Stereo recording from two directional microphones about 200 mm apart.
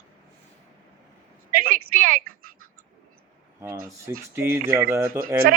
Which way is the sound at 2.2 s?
90° right.